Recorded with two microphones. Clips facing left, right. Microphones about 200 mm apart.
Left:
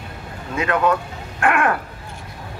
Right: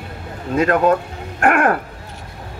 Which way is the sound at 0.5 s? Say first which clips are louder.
Right 4 dB; 45° right (ahead or behind).